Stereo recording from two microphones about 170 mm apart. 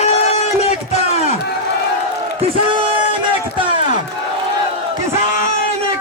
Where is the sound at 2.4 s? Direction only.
30° right (ahead or behind).